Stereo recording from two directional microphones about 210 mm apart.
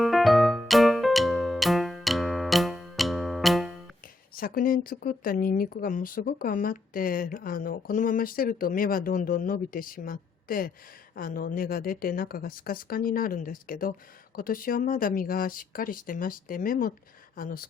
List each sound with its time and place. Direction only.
0.0 s music: centre (ahead or behind)
4.4 s speech: 40° left (ahead or behind)